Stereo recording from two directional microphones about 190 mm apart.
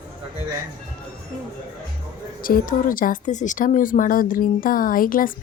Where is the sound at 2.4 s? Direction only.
45° left (ahead or behind).